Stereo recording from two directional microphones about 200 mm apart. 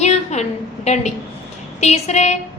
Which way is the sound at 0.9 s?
35° left (ahead or behind).